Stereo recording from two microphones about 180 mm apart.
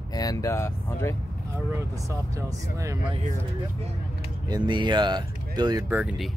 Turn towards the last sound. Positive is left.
turn(degrees=-5)  # may be behind; listen again after turning